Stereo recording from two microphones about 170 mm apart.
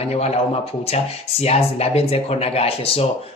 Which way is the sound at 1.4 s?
35° left (ahead or behind).